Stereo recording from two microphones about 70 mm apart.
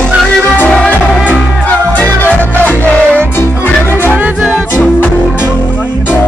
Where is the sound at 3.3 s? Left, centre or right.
Left.